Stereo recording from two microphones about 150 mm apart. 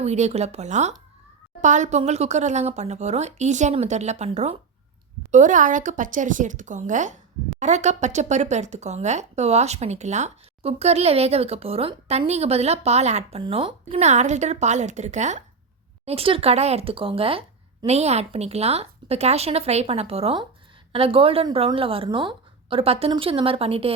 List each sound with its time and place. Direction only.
0.0 s speech: 45° right (ahead or behind)
13.4 s speech: 35° right (ahead or behind); by 15.4 s 50° right (ahead or behind)
16.0 s a woman's voice: 40° right (ahead or behind)